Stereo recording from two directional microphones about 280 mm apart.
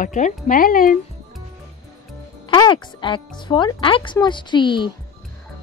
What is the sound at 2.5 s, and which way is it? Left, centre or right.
Speech, centre.